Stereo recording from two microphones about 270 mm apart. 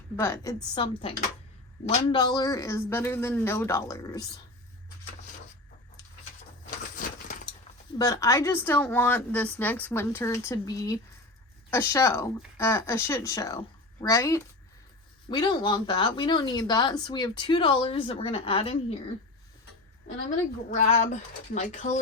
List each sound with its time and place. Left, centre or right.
0.2 s speech: centre
6.7 s crushing: left
7.9 s a woman's voice: centre
20.2 s speech: left